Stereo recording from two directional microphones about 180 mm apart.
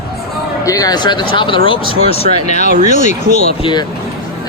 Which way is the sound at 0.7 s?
20° left (ahead or behind).